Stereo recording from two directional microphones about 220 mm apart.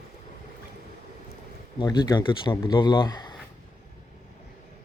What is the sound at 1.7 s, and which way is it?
Speech, 20° left (ahead or behind).